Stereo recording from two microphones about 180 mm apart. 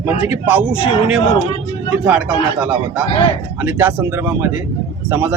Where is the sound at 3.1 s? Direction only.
30° left (ahead or behind).